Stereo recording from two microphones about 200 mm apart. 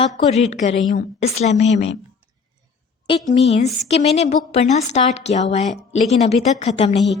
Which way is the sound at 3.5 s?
35° left (ahead or behind).